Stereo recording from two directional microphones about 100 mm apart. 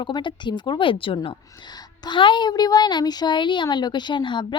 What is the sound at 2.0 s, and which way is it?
A woman's voice, 55° left (ahead or behind).